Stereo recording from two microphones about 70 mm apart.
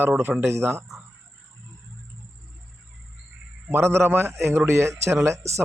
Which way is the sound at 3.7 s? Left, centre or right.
Right.